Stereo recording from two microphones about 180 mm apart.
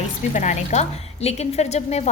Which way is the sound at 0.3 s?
40° left (ahead or behind).